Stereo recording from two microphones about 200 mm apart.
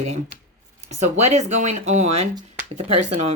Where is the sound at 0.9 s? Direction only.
35° right (ahead or behind).